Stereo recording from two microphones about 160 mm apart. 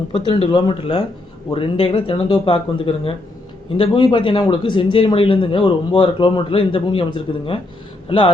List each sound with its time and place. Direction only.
0.1 s speech: 35° left (ahead or behind)